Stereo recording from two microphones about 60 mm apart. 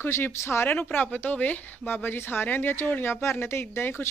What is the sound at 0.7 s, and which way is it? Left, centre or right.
Speech, left.